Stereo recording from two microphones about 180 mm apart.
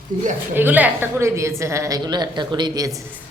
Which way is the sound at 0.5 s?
10° right (ahead or behind).